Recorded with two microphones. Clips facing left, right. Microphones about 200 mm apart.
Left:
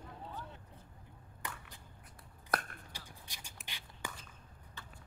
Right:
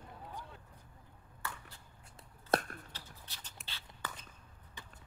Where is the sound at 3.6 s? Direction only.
15° left (ahead or behind).